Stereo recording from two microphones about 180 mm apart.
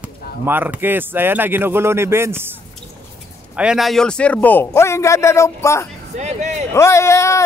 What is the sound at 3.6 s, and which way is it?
A man's voice, 5° right (ahead or behind).